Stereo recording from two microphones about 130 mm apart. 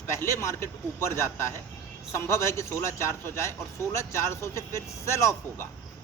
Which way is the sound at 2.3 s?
20° left (ahead or behind).